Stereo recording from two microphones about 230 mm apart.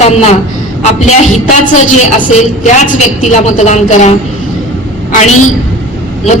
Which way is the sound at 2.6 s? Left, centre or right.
Left.